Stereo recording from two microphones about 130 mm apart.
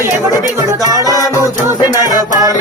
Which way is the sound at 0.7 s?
30° right (ahead or behind).